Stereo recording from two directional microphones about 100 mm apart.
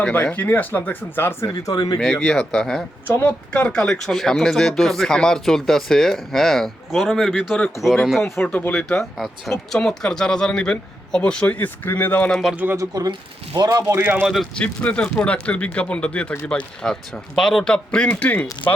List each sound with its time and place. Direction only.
0.0 s speech: 15° left (ahead or behind)
1.5 s speech: 40° left (ahead or behind)
2.0 s speech: 5° left (ahead or behind)
8.4 s speech: 15° left (ahead or behind)
9.1 s speech: 5° left (ahead or behind)
12.7 s speech: 35° right (ahead or behind)
13.1 s speech: 50° right (ahead or behind)
13.7 s speech: 40° right (ahead or behind)
13.9 s a man's voice: 20° right (ahead or behind)
14.5 s speech: 10° left (ahead or behind)